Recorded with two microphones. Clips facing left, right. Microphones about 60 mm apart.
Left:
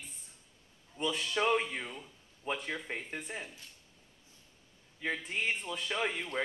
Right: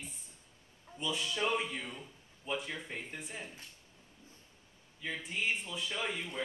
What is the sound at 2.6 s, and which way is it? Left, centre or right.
Speech, left.